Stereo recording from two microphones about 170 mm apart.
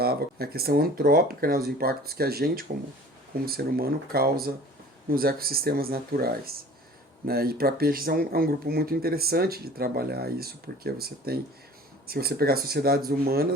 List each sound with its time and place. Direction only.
0.0 s speech: 65° right (ahead or behind)